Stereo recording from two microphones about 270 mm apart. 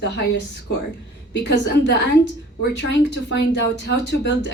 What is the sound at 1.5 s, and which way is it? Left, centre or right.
A woman's voice, left.